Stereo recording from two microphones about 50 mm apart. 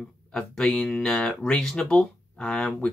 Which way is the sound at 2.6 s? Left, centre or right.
Left.